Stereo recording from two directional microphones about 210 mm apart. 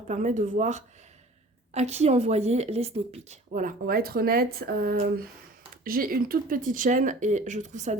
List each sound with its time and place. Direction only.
0.1 s speech: 35° right (ahead or behind)